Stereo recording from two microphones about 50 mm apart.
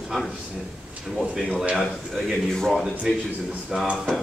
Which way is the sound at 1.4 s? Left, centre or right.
Right.